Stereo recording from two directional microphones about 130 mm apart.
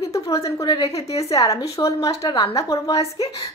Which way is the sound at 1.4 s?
25° left (ahead or behind).